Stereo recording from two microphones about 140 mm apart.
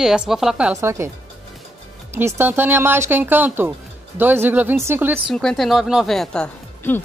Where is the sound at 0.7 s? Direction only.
20° right (ahead or behind).